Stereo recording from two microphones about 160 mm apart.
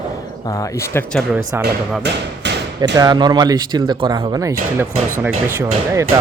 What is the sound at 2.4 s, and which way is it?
Hammer, 90° right.